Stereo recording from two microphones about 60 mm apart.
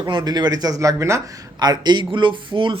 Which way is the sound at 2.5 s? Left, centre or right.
Right.